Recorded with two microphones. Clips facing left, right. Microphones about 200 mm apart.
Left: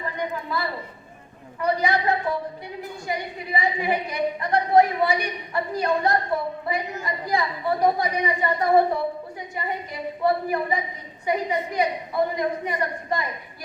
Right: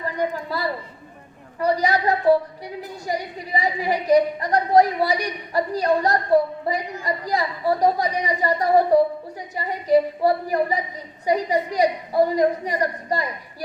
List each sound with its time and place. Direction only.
0.5 s a woman's voice: 35° right (ahead or behind)